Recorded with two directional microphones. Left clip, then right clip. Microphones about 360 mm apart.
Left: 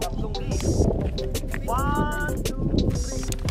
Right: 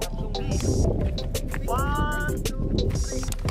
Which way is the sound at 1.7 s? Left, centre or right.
Centre.